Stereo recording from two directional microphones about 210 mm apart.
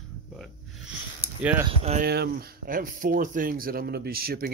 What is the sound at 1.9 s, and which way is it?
Speech, 50° right (ahead or behind).